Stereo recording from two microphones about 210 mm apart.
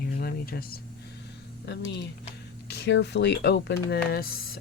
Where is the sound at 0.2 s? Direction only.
45° left (ahead or behind).